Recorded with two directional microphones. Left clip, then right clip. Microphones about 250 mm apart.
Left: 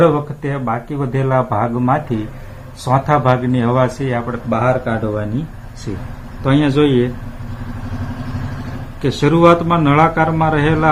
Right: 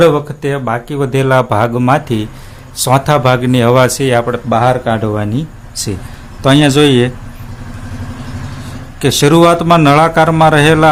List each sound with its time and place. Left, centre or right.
0.0 s speech: right
6.4 s speech: right
9.0 s speech: right